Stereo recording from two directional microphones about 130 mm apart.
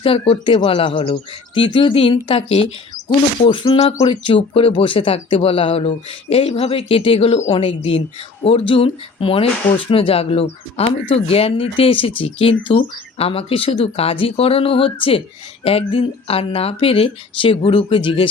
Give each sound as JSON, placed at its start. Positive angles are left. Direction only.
{"t": 0.0, "sound": "speech", "side_deg": 45}